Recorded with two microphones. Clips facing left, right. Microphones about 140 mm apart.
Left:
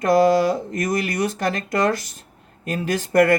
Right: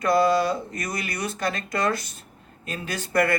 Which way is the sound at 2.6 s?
50° left (ahead or behind).